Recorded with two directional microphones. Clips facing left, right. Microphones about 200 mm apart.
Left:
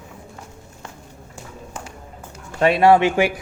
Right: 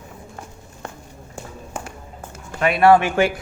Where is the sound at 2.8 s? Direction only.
15° left (ahead or behind).